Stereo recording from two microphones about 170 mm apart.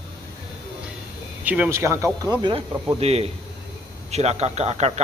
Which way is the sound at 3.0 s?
35° right (ahead or behind).